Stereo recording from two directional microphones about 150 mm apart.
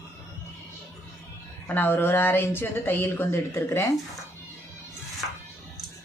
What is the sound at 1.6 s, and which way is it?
Speech, 15° left (ahead or behind).